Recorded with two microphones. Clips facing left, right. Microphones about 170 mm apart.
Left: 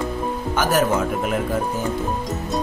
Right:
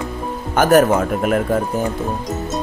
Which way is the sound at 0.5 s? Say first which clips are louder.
Right 7 dB; 55° right (ahead or behind).